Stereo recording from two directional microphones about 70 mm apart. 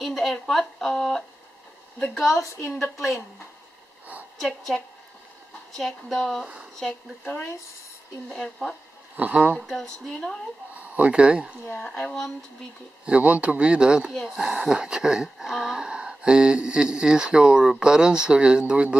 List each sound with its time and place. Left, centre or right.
0.0 s speech: centre
2.3 s a woman's voice: left
4.4 s speech: centre
6.4 s speech: centre
6.9 s speech: centre
9.1 s speech: right
10.0 s speech: centre
10.8 s speech: centre
11.8 s speech: centre
13.0 s speech: centre